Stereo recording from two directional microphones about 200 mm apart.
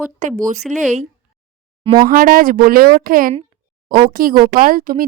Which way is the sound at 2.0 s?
45° right (ahead or behind).